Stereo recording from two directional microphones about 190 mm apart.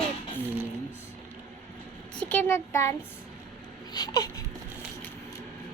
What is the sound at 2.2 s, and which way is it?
Speech, 10° left (ahead or behind).